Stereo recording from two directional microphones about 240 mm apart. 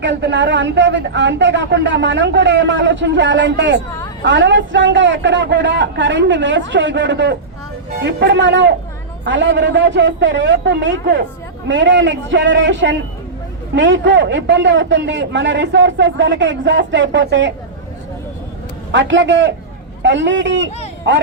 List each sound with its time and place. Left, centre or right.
0.0 s speech: right
18.9 s speech: right